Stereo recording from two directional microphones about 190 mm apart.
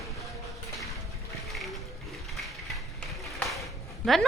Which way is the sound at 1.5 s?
Centre (ahead or behind).